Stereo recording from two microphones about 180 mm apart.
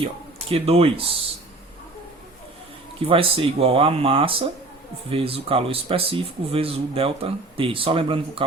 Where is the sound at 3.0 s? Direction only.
30° right (ahead or behind).